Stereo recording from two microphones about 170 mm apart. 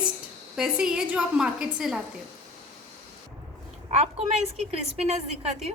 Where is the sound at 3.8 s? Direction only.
40° right (ahead or behind).